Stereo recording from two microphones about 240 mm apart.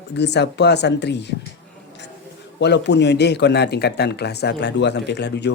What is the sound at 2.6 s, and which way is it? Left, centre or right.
Speech, left.